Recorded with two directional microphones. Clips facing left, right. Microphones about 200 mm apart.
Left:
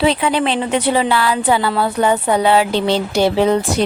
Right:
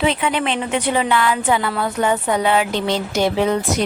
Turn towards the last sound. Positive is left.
turn(degrees=30)  # may be behind; listen again after turning